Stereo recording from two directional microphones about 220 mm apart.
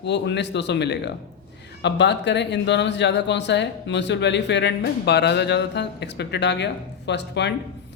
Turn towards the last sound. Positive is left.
turn(degrees=50)  # may be behind; listen again after turning